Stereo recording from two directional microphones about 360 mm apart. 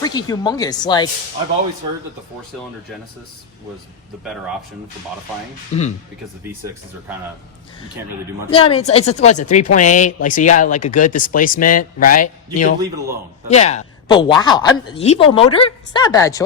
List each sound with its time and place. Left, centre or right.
0.0 s a woman's voice: centre
5.7 s a woman's voice: centre
8.4 s a woman's voice: centre